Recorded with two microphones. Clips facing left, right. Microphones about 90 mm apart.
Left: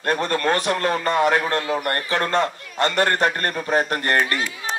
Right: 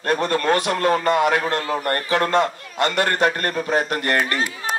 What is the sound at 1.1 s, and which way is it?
Speech, 35° left (ahead or behind).